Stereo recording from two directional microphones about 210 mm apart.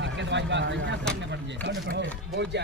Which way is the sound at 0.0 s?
60° right (ahead or behind).